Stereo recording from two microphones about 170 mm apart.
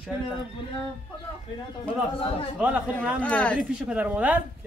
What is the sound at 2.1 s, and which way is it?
Speech, 35° left (ahead or behind).